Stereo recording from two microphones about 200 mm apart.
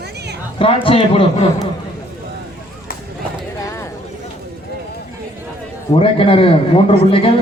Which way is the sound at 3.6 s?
15° left (ahead or behind).